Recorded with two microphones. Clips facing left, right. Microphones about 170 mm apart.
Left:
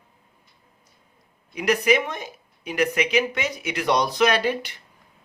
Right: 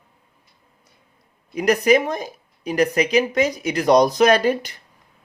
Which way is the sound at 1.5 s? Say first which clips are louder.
Right 4 dB; 40° right (ahead or behind).